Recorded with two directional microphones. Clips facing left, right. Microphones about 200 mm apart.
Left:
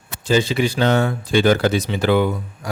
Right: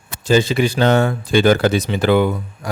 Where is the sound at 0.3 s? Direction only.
45° right (ahead or behind).